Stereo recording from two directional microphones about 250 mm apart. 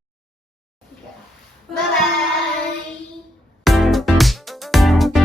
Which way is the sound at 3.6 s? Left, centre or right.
Centre.